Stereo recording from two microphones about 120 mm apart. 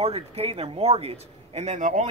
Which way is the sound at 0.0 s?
60° right (ahead or behind).